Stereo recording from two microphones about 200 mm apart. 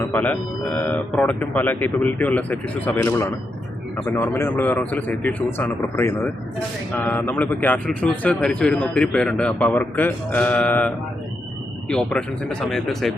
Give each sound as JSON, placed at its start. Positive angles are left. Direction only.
{"t": 0.0, "sound": "speech", "side_deg": 10}